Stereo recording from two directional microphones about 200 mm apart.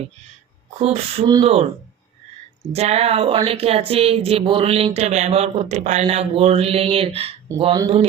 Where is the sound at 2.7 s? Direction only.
30° right (ahead or behind).